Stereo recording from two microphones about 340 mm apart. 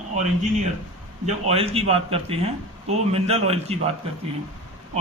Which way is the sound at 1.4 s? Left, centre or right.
Centre.